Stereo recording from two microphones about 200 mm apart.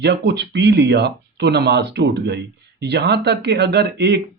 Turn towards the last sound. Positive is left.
turn(degrees=-60)  # may be behind; listen again after turning